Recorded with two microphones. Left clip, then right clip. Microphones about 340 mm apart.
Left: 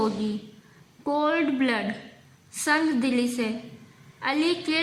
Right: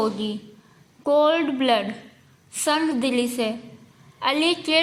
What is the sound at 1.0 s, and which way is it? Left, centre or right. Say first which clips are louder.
A woman's voice: right 6 dB; centre.